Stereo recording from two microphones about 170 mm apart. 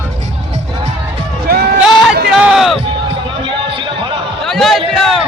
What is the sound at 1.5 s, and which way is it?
Sheep, 60° right (ahead or behind).